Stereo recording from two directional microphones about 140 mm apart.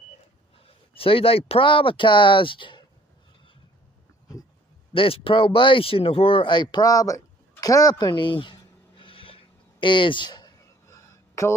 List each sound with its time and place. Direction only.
0.6 s speech: 40° left (ahead or behind)
4.9 s speech: 40° left (ahead or behind)
7.6 s a sound: 25° left (ahead or behind)